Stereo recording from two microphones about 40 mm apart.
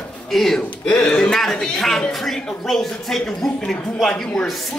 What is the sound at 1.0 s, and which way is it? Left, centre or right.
Speech, left.